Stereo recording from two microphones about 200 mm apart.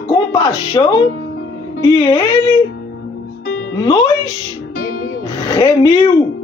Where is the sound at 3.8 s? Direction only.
20° left (ahead or behind).